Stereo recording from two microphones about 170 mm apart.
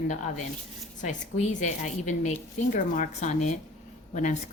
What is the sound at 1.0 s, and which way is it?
A woman's voice, 45° left (ahead or behind).